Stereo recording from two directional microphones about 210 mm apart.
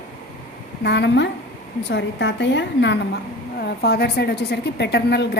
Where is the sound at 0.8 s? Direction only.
55° left (ahead or behind).